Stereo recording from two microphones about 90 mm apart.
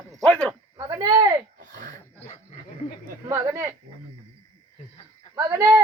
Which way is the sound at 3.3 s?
30° right (ahead or behind).